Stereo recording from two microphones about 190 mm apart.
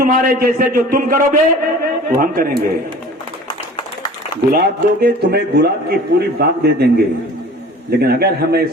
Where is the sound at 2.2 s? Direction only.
50° right (ahead or behind).